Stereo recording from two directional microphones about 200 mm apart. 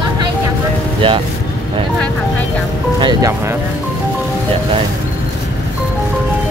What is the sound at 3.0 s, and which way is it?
Speech, 20° right (ahead or behind).